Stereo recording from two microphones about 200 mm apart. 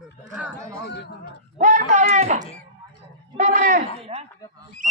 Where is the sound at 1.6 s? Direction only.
40° right (ahead or behind).